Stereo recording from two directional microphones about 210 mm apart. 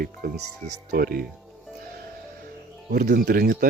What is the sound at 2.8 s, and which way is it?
Speech, 50° right (ahead or behind).